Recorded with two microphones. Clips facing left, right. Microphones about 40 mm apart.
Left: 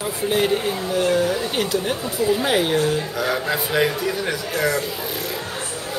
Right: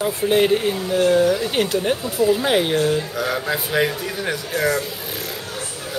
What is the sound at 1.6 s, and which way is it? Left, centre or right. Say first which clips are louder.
Speech: right 3 dB; right.